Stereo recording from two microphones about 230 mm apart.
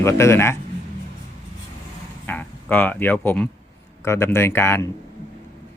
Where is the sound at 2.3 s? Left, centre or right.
Centre.